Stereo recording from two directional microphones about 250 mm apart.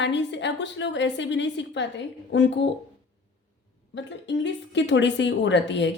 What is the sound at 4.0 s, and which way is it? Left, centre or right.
Speech, left.